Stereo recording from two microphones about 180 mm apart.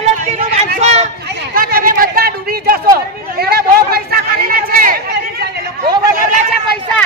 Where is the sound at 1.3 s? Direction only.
55° right (ahead or behind).